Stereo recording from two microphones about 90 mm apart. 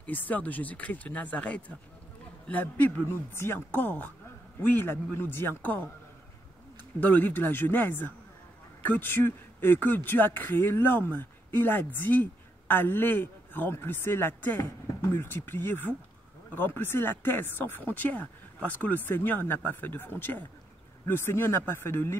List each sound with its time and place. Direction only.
0.0 s speech: 20° left (ahead or behind)
7.0 s speech: 20° left (ahead or behind)